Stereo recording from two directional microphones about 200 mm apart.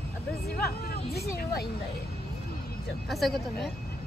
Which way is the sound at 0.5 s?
50° left (ahead or behind).